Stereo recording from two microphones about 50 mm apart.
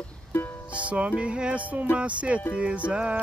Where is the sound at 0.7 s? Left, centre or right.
Right.